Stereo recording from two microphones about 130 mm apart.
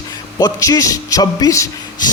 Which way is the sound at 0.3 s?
30° left (ahead or behind).